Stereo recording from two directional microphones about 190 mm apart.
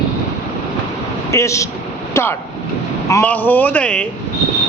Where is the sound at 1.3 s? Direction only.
15° left (ahead or behind).